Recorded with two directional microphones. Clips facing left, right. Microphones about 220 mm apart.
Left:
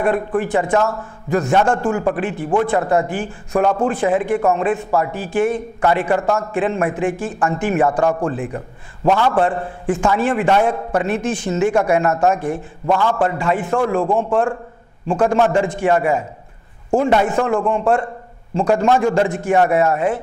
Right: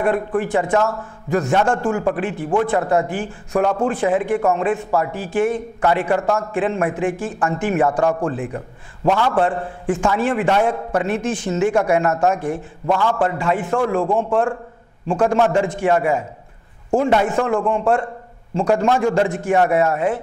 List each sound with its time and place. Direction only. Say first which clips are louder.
0.0 s a man's voice: left 1 dB; 15° left (ahead or behind)
12.1 s a man's voice: left 1 dB; 25° left (ahead or behind)
19.1 s speech: left 1 dB; 10° left (ahead or behind)
19.5 s a man's voice: left 1 dB; 20° left (ahead or behind)